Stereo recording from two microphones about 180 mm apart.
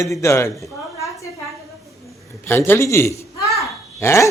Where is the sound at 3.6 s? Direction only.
15° left (ahead or behind).